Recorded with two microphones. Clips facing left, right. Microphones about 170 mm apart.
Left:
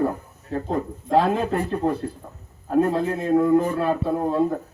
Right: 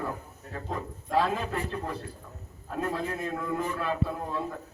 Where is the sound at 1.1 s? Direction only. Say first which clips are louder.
Left 8 dB; 55° left (ahead or behind).